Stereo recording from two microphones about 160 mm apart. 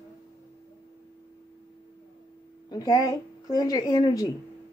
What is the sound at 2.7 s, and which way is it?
A woman's voice, 25° left (ahead or behind).